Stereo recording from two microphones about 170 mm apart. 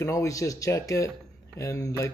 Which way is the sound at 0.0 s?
20° left (ahead or behind).